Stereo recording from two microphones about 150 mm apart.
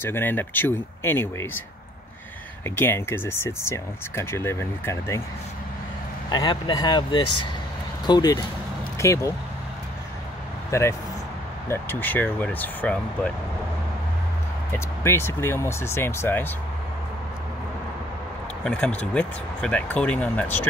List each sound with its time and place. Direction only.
0.0 s speech: 15° left (ahead or behind)
2.7 s speech: 15° left (ahead or behind)
6.3 s speech: 30° left (ahead or behind)
10.7 s speech: 20° left (ahead or behind)
14.7 s speech: 15° left (ahead or behind)
18.6 s speech: 5° left (ahead or behind)